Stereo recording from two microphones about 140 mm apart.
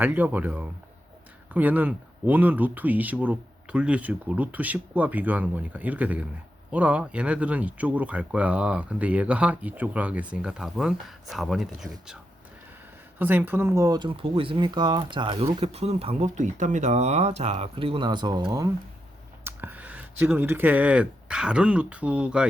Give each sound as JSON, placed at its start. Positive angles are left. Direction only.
{"t": 0.0, "sound": "speech", "side_deg": -10}
{"t": 13.1, "sound": "speech", "side_deg": -15}
{"t": 15.6, "sound": "speech", "side_deg": -45}
{"t": 19.5, "sound": "speech", "side_deg": -15}